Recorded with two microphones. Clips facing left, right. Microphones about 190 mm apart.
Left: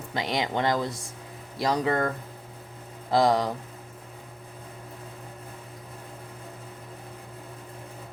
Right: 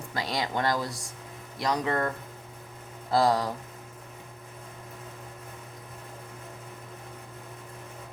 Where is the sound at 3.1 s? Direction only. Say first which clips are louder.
Left 2 dB; 20° left (ahead or behind).